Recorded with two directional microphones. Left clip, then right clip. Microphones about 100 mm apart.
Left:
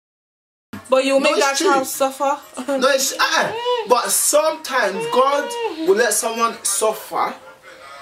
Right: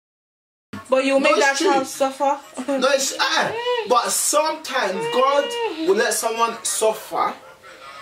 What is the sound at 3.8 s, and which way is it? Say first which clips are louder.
Speech: left 1 dB; 35° left (ahead or behind).